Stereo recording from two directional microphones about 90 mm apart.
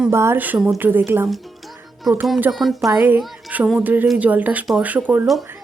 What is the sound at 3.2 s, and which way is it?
Music, centre (ahead or behind).